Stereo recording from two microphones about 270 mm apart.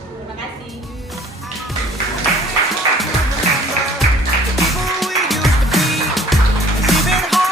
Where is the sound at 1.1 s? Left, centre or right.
Centre.